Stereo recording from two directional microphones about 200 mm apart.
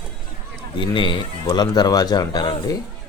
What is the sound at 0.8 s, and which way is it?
A man's voice, 25° left (ahead or behind).